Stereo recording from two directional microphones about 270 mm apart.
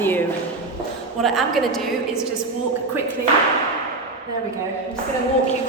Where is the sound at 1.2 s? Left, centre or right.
Centre.